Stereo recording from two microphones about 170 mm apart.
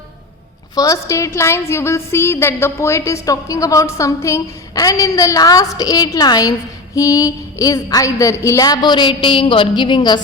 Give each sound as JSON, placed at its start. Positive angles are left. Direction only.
{"t": 0.8, "sound": "a woman's voice", "side_deg": 20}